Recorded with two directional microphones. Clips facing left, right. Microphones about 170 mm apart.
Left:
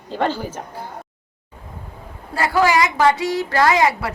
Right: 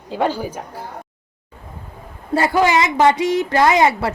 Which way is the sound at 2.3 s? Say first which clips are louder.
Right 1 dB; 20° right (ahead or behind).